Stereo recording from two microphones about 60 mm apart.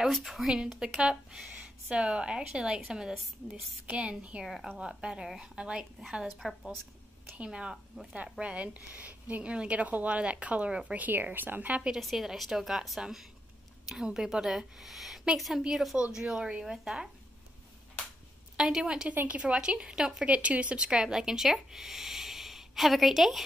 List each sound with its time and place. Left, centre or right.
0.1 s a woman's voice: centre
6.2 s a woman's voice: centre
7.3 s a woman's voice: centre
12.0 s a woman's voice: centre
18.6 s a woman's voice: centre
19.0 s speech: right; by 23.4 s centre